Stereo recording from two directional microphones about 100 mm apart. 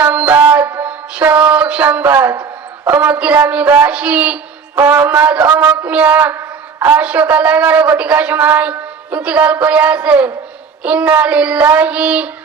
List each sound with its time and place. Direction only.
0.0 s music: 15° right (ahead or behind)
2.8 s a man's voice: 15° right (ahead or behind)
4.7 s a man's voice: 25° right (ahead or behind)